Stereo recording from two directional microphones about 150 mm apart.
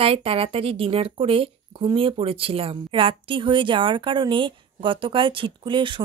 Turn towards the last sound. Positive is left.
turn(degrees=-35)  # may be behind; listen again after turning